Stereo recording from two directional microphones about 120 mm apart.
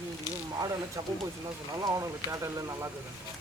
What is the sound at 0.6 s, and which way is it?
Speech, 30° right (ahead or behind).